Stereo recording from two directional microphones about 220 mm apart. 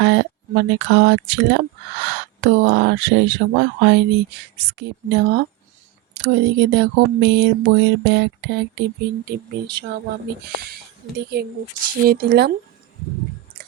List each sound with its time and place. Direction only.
0.0 s speech: 55° right (ahead or behind)
11.3 s speech: 45° right (ahead or behind)